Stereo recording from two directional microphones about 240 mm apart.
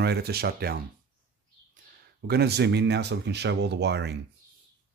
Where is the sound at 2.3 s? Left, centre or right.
Right.